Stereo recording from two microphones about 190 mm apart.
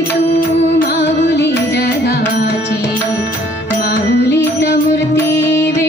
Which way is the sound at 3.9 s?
60° left (ahead or behind).